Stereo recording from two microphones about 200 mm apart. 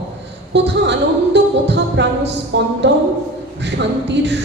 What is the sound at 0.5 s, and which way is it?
Speech, 60° right (ahead or behind).